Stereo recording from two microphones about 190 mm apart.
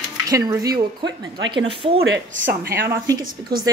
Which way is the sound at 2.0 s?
75° right (ahead or behind).